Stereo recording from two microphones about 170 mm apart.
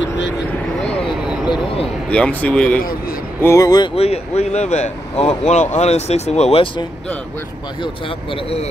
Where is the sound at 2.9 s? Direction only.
60° left (ahead or behind).